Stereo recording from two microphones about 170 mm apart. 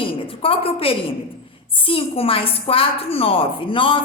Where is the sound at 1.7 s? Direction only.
30° left (ahead or behind).